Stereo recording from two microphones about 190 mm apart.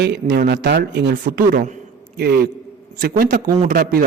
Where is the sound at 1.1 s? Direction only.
45° right (ahead or behind).